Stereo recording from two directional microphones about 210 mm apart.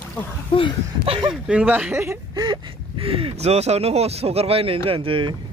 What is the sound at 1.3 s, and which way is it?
Speech, 5° right (ahead or behind).